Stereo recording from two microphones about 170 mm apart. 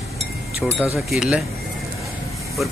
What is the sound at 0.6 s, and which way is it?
Speech, 5° left (ahead or behind).